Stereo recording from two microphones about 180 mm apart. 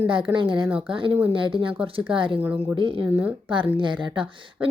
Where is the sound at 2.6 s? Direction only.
30° right (ahead or behind).